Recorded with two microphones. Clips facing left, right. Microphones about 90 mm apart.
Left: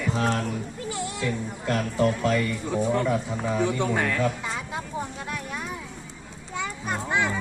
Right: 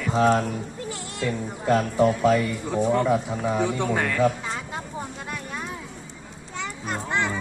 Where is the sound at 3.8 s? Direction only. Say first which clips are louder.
Right 1 dB; centre (ahead or behind).